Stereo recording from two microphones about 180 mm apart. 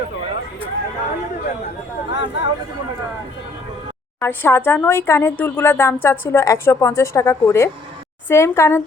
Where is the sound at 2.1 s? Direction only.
75° left (ahead or behind).